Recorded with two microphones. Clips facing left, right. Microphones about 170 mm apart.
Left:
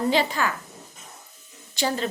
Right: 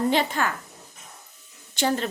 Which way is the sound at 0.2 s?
50° right (ahead or behind).